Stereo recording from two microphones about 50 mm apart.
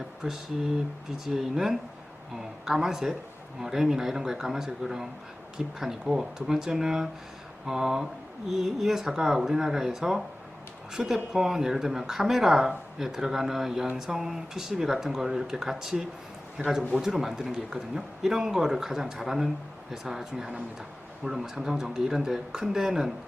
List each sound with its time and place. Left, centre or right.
0.2 s speech: centre